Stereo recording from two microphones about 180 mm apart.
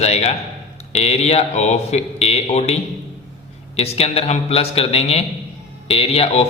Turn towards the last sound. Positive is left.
turn(degrees=30)  # may be behind; listen again after turning